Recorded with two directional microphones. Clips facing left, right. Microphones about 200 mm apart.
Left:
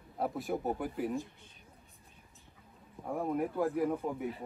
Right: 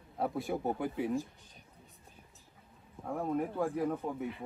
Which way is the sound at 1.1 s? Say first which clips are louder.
Right 2 dB; 35° right (ahead or behind).